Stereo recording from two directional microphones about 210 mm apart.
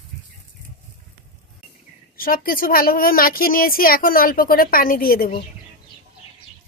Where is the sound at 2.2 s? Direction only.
45° left (ahead or behind).